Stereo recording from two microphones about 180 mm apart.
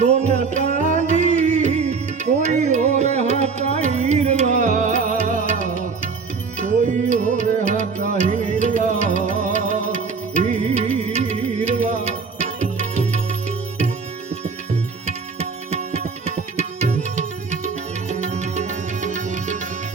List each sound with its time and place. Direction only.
0.0 s music: 40° right (ahead or behind)
15.0 s music: 40° right (ahead or behind)